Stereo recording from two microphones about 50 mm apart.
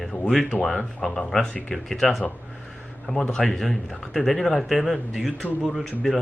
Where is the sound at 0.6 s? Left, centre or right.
Centre.